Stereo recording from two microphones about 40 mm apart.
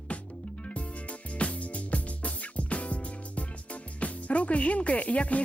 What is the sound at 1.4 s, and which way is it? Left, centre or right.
Music, left.